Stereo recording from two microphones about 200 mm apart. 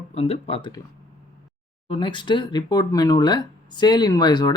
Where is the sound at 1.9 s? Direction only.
25° left (ahead or behind).